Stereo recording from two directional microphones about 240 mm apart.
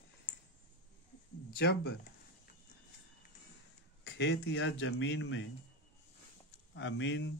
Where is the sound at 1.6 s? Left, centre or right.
Left.